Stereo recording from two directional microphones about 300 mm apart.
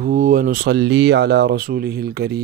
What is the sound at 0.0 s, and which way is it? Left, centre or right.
Speech, right.